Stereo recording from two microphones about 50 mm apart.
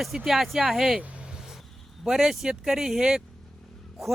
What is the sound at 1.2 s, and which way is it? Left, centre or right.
Vehicle, centre.